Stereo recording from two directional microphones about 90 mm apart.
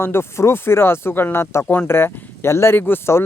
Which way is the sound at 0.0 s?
30° left (ahead or behind).